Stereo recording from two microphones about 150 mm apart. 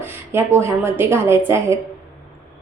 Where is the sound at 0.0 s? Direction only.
15° right (ahead or behind).